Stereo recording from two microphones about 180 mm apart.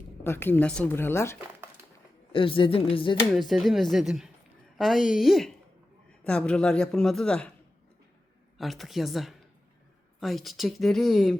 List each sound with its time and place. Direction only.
0.3 s speech: 10° left (ahead or behind)
2.3 s speech: 30° left (ahead or behind)
3.3 s speech: centre (ahead or behind)
8.5 s speech: centre (ahead or behind)